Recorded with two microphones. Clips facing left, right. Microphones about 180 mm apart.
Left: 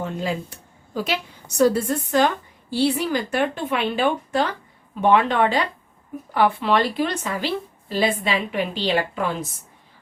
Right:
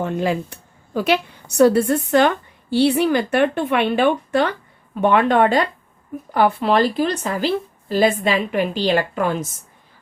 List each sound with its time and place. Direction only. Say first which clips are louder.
0.0 s a woman's voice: right 5 dB; 65° right (ahead or behind)